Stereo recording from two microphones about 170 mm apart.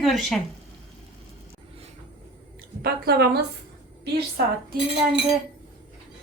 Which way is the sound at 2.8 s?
70° right (ahead or behind).